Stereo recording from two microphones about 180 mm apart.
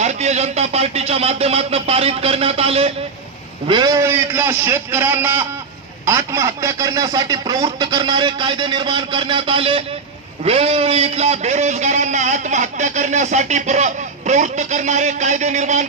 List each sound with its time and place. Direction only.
0.0 s a man's voice: 40° right (ahead or behind)